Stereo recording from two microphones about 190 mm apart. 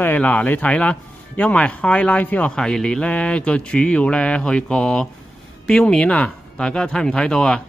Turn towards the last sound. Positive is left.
turn(degrees=5)  # may be behind; listen again after turning